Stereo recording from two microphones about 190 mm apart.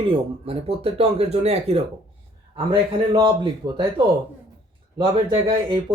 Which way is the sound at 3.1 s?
25° right (ahead or behind).